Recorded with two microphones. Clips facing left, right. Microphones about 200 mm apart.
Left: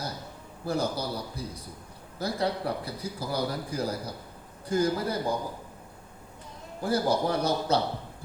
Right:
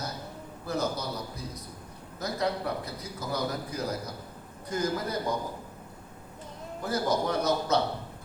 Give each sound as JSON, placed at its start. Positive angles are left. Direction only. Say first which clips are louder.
{"t": 0.6, "sound": "a man's voice", "louder": "left 2 dB", "side_deg": 30}
{"t": 6.8, "sound": "a man's voice", "louder": "left 2 dB", "side_deg": 30}